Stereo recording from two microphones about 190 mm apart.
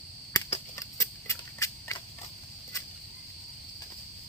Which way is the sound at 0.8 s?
15° left (ahead or behind).